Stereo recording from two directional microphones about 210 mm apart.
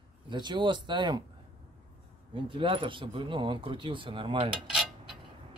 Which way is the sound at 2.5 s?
25° right (ahead or behind).